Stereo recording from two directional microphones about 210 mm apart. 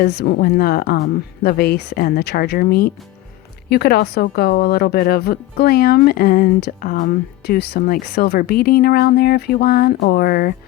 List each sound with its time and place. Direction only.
0.0 s speech: 50° left (ahead or behind)